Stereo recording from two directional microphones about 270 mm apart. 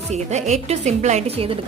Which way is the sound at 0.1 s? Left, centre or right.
Right.